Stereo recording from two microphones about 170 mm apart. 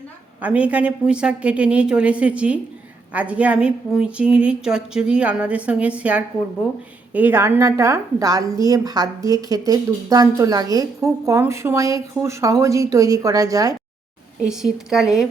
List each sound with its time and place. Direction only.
0.4 s a woman's voice: 10° right (ahead or behind)
14.4 s speech: 5° right (ahead or behind)